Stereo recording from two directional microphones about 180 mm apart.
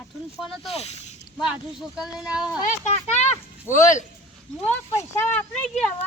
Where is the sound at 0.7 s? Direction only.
35° left (ahead or behind).